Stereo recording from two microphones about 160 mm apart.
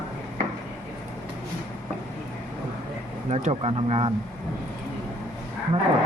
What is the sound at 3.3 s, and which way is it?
Speech, 40° right (ahead or behind).